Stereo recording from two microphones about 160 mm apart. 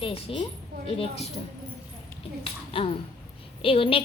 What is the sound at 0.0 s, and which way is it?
A woman's voice, 35° left (ahead or behind).